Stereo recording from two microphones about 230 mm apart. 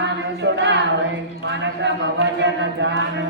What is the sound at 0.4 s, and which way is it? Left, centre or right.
Speech, right.